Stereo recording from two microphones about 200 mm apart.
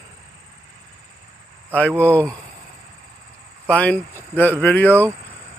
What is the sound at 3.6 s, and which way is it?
Speech, 5° left (ahead or behind).